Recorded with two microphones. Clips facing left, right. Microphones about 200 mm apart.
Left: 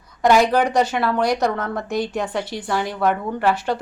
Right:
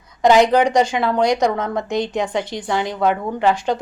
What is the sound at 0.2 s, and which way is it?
A woman's voice, 20° right (ahead or behind).